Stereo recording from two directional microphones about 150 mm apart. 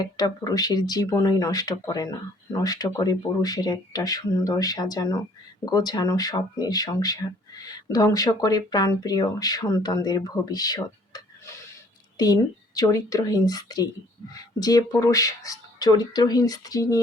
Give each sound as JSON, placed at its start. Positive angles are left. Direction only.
{"t": 0.0, "sound": "speech", "side_deg": 25}